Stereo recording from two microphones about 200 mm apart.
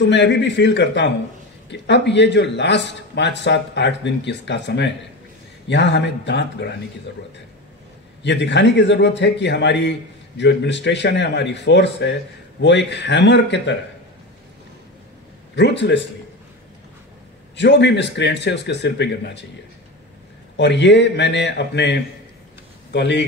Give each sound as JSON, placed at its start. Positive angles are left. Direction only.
{"t": 0.1, "sound": "a man's voice", "side_deg": 60}
{"t": 8.2, "sound": "a man's voice", "side_deg": 60}
{"t": 15.5, "sound": "a man's voice", "side_deg": 60}
{"t": 17.6, "sound": "a man's voice", "side_deg": 60}
{"t": 20.5, "sound": "a man's voice", "side_deg": 60}